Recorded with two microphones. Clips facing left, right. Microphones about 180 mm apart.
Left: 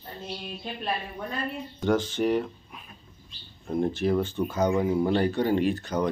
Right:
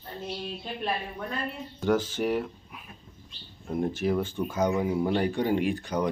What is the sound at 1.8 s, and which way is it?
Speech, 10° right (ahead or behind).